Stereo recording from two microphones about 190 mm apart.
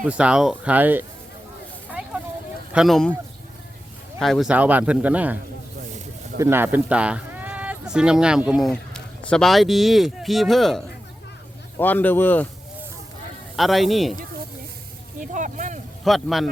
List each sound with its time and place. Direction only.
0.0 s speech: 5° right (ahead or behind)
1.9 s vehicle: 5° right (ahead or behind)
2.7 s a man's voice: centre (ahead or behind)
4.2 s speech: centre (ahead or behind)
6.4 s speech: 10° right (ahead or behind); by 12.5 s 10° left (ahead or behind)
13.6 s a man's voice: centre (ahead or behind)
15.2 s vehicle: 40° right (ahead or behind)
16.0 s a man's voice: centre (ahead or behind)